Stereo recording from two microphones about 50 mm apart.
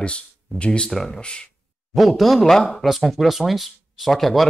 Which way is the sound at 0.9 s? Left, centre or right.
Centre.